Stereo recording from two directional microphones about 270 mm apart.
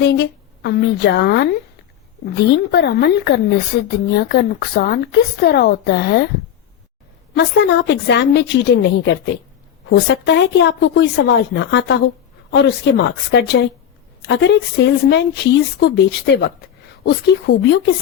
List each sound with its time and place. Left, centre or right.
0.0 s speech: left
7.3 s speech: left